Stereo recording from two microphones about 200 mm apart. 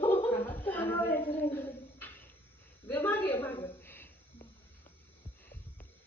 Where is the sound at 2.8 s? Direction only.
10° left (ahead or behind).